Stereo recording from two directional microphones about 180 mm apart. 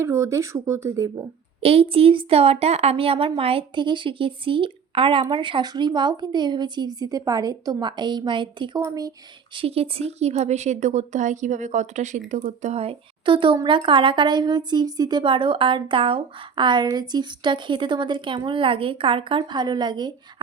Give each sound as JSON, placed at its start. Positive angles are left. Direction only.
{"t": 0.0, "sound": "speech", "side_deg": -15}
{"t": 1.6, "sound": "speech", "side_deg": -30}
{"t": 9.6, "sound": "speech", "side_deg": -30}